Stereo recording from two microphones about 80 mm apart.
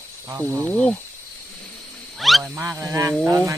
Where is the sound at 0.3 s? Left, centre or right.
Right.